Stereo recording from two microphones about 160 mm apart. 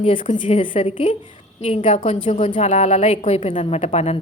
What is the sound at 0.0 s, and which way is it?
A woman's voice, 50° left (ahead or behind).